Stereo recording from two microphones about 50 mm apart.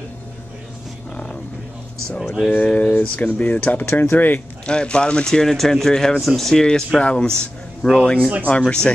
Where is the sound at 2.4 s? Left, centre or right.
Left.